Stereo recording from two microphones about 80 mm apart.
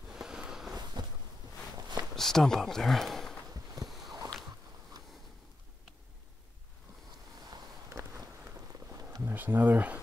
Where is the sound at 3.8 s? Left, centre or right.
Centre.